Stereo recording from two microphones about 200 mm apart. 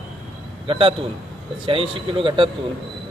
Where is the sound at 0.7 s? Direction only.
25° right (ahead or behind).